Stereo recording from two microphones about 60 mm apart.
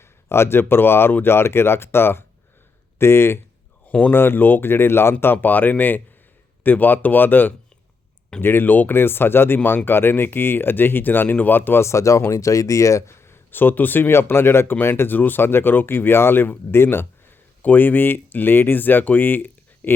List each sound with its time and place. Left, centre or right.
0.3 s speech: left
3.8 s speech: left
4.1 s speech: left
11.3 s speech: left
11.5 s speech: left
11.9 s speech: left